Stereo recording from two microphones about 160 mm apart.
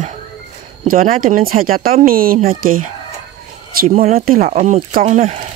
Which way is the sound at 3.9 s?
45° right (ahead or behind).